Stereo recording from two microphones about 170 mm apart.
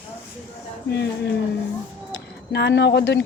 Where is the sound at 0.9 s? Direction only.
80° left.